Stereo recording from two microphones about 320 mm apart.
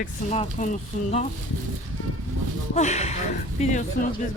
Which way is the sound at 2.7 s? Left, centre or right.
Left.